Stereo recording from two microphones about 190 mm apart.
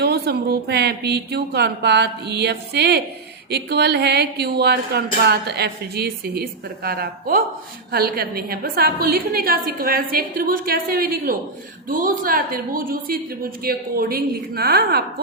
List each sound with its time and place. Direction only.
0.0 s a woman's voice: 55° right (ahead or behind)